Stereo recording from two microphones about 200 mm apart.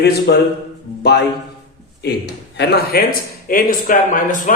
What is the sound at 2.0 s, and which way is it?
A man's voice, 55° left (ahead or behind).